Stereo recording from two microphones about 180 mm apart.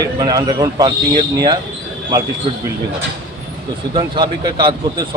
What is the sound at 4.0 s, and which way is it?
Speech, 25° right (ahead or behind).